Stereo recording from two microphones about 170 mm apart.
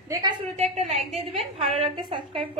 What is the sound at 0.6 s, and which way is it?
Speech, 40° right (ahead or behind).